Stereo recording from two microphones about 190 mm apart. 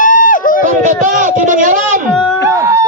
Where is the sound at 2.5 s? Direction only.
15° right (ahead or behind).